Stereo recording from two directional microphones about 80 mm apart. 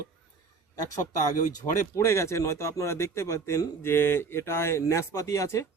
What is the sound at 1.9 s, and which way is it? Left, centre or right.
Speech, left.